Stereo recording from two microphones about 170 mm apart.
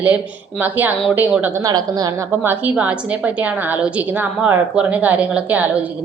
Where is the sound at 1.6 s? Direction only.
25° right (ahead or behind).